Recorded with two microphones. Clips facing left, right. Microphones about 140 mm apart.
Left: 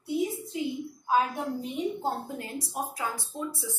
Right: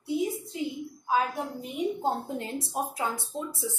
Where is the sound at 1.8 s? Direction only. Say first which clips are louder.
Right 5 dB; 15° right (ahead or behind).